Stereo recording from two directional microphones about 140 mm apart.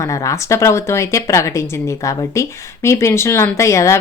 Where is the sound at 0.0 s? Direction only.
20° left (ahead or behind).